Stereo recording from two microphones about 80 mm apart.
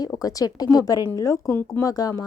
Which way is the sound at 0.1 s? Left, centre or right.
Left.